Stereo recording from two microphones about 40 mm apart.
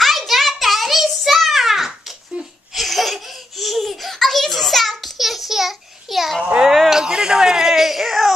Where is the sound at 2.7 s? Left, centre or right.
Centre.